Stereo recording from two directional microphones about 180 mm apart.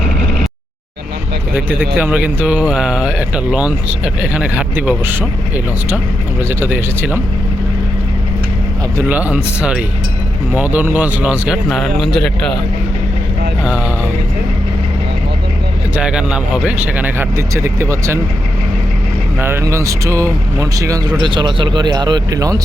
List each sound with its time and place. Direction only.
1.5 s speech: 10° right (ahead or behind)
6.5 s speech: 10° right (ahead or behind)
9.0 s speech: 10° right (ahead or behind)
13.7 s speech: 5° right (ahead or behind)
16.0 s speech: 5° right (ahead or behind)
19.4 s speech: 15° right (ahead or behind)